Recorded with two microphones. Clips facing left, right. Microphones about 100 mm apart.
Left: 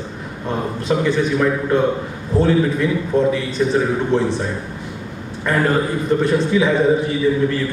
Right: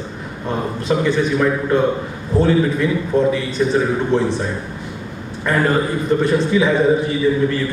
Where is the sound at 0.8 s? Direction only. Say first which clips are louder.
Right 1 dB; 25° right (ahead or behind).